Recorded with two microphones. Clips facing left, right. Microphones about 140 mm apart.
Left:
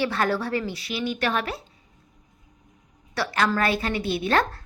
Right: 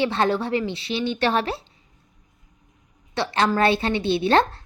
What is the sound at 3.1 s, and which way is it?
A woman's voice, 25° right (ahead or behind).